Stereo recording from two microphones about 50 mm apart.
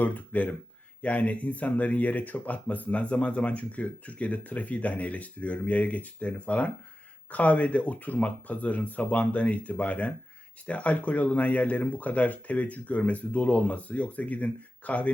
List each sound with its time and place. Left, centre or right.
0.0 s speech: left